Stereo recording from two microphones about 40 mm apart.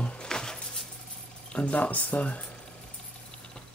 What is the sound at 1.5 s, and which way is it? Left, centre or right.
Speech, left.